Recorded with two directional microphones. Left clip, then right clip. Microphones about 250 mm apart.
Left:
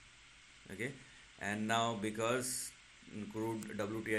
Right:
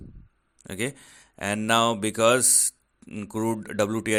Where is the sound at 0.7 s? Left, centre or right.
Right.